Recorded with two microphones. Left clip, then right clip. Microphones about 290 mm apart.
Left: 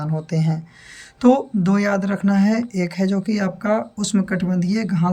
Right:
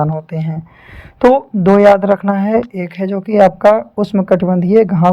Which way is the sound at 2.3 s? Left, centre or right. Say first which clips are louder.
Right 7 dB; centre.